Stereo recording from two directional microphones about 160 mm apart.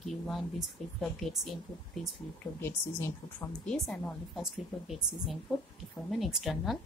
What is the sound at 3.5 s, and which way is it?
Speech, 5° left (ahead or behind).